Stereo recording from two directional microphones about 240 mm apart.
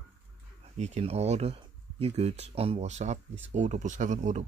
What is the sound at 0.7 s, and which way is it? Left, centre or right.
Speech, right.